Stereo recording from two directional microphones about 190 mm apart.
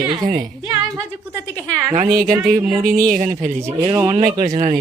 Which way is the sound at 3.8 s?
20° right (ahead or behind).